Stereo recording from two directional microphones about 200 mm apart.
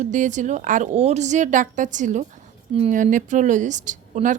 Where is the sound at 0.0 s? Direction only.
40° right (ahead or behind).